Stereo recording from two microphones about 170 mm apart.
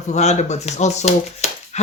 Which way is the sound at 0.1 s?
40° left (ahead or behind).